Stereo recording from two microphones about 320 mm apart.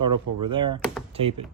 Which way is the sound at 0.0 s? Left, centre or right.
Right.